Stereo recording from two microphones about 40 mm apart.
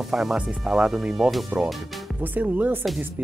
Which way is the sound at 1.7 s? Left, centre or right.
Centre.